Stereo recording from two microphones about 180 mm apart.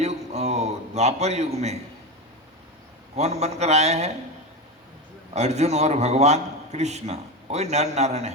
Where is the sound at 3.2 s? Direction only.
40° right (ahead or behind).